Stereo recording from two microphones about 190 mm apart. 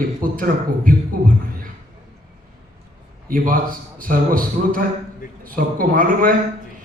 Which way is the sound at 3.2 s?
45° right (ahead or behind).